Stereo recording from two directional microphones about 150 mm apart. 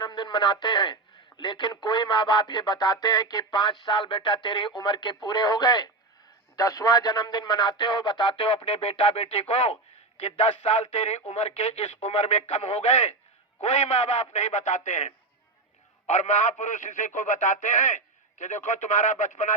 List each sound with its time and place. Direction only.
0.0 s speech: 30° left (ahead or behind); by 19.5 s 55° left (ahead or behind)